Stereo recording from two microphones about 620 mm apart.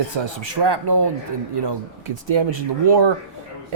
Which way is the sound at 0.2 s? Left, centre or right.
Right.